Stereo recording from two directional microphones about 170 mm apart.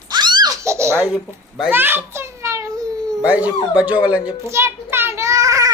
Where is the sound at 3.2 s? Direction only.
10° right (ahead or behind).